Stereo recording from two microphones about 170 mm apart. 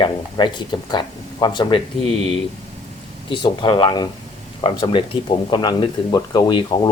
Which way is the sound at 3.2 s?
25° left (ahead or behind).